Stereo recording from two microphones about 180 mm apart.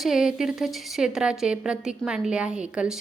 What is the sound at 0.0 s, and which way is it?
A woman's voice, centre (ahead or behind).